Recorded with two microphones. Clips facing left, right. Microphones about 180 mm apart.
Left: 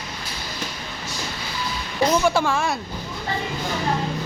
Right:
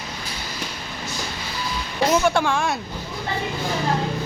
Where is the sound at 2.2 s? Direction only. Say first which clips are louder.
Even; centre (ahead or behind).